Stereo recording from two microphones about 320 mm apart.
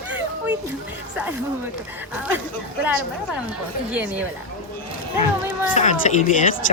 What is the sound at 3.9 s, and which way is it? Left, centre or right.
Speech, centre.